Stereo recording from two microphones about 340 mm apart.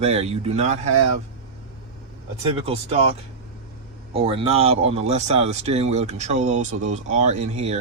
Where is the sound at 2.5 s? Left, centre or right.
Centre.